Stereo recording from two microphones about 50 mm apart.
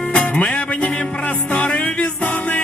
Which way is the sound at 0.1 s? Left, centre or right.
Left.